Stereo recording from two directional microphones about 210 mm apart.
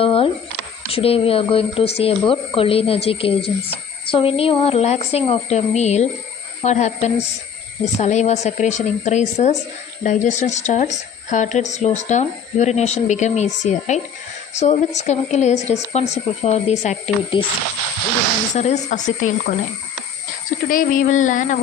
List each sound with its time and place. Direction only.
0.0 s a sound: 25° left (ahead or behind)
0.9 s a woman's voice: 25° left (ahead or behind)
18.5 s speech: 35° left (ahead or behind)
20.7 s speech: 40° left (ahead or behind)